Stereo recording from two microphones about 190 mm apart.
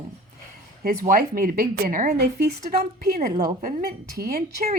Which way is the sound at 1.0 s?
50° right (ahead or behind).